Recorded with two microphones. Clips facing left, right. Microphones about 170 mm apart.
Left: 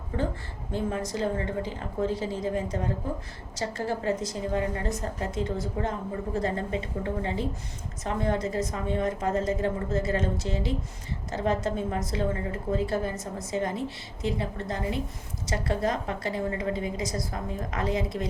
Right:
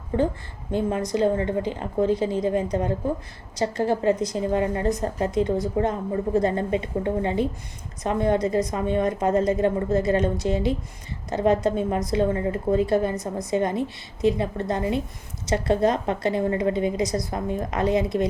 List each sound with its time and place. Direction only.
0.7 s a woman's voice: 20° right (ahead or behind)